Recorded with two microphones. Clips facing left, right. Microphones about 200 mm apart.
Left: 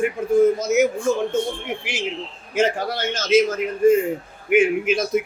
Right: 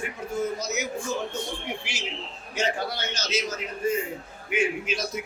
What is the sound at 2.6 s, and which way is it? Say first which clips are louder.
A man's voice: left 7 dB; 50° left (ahead or behind).